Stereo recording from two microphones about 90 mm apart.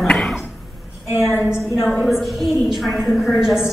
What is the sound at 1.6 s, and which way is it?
A woman's voice, centre (ahead or behind).